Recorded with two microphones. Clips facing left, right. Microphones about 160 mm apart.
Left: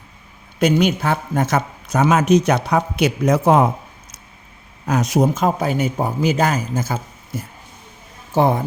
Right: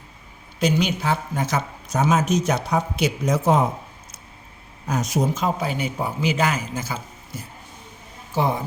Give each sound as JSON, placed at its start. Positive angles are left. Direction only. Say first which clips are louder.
{"t": 0.6, "sound": "a man's voice", "louder": "left 5 dB", "side_deg": 50}
{"t": 4.9, "sound": "speech", "louder": "left 6 dB", "side_deg": 70}
{"t": 5.3, "sound": "a man's voice", "louder": "left 5 dB", "side_deg": 50}